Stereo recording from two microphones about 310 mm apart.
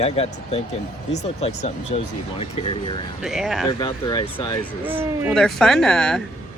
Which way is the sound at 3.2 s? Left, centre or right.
Centre.